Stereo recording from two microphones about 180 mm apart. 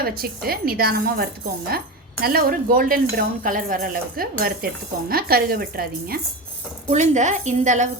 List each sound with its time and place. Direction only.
0.0 s dishes: 55° right (ahead or behind)
6.9 s a woman's voice: 40° right (ahead or behind)